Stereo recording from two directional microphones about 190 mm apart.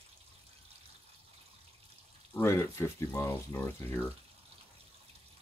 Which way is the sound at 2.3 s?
15° left (ahead or behind).